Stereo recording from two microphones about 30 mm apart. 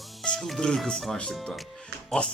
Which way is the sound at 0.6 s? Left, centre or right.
Left.